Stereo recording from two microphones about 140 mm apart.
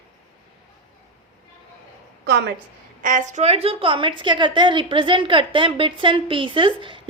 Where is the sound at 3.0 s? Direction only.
65° right (ahead or behind).